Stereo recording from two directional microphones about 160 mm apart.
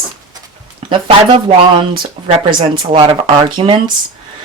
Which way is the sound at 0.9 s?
30° right (ahead or behind).